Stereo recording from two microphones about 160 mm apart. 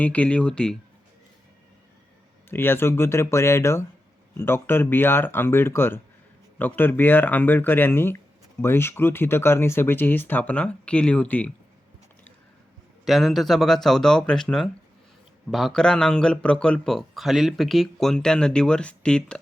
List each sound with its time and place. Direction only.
0.0 s speech: 10° left (ahead or behind)
2.5 s speech: 15° left (ahead or behind)
13.1 s a man's voice: centre (ahead or behind)